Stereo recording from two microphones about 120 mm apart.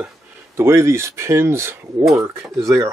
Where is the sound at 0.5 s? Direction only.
20° right (ahead or behind).